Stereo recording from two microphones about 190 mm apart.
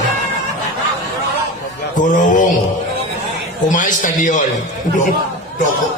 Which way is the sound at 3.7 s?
40° left (ahead or behind).